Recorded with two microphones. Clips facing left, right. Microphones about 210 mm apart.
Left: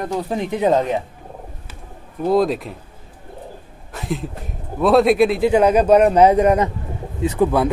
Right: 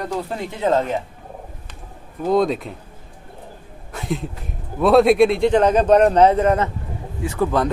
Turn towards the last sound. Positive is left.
turn(degrees=15)  # may be behind; listen again after turning